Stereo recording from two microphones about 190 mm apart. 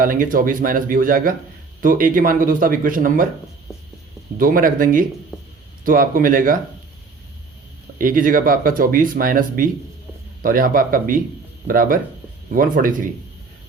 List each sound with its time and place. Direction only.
0.0 s speech: 45° right (ahead or behind)
4.4 s speech: 45° right (ahead or behind)
7.9 s speech: 45° right (ahead or behind)